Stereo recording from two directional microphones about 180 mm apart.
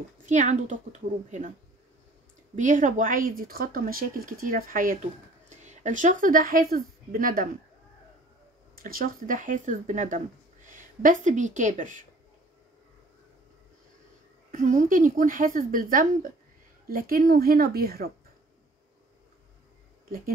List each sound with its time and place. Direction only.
0.3 s a woman's voice: 40° right (ahead or behind)
2.5 s speech: 45° right (ahead or behind)
8.7 s speech: 50° right (ahead or behind)
14.5 s a woman's voice: 45° right (ahead or behind)